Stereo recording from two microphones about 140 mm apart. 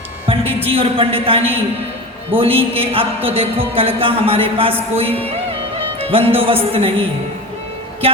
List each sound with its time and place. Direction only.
0.3 s a woman's voice: 40° right (ahead or behind)